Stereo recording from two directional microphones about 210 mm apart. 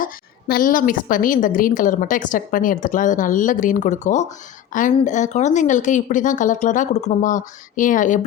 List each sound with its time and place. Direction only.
0.0 s a woman's voice: 45° left (ahead or behind)